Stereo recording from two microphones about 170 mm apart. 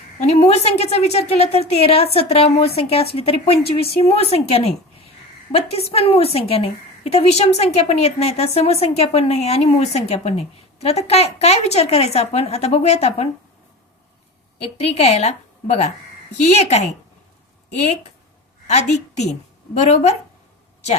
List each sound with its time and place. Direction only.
0.2 s a woman's voice: 35° left (ahead or behind)
14.6 s a woman's voice: 40° left (ahead or behind)